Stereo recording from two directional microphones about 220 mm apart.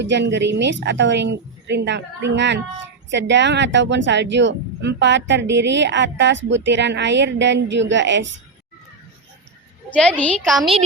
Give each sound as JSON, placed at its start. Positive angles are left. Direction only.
{"t": 0.0, "sound": "speech", "side_deg": -50}
{"t": 9.9, "sound": "a woman's voice", "side_deg": 5}